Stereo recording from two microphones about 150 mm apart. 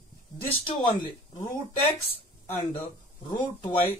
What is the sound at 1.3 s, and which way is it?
Speech, 55° left (ahead or behind).